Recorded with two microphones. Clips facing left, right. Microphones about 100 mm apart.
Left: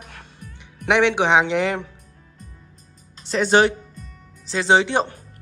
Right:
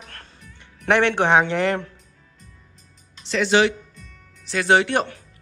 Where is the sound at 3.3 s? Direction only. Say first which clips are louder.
Left 2 dB; 40° left (ahead or behind).